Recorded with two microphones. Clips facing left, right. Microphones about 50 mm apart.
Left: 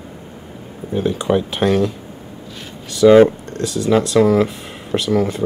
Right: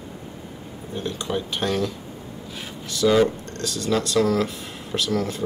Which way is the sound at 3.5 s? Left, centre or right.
Centre.